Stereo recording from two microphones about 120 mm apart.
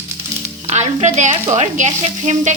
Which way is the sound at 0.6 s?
75° right (ahead or behind).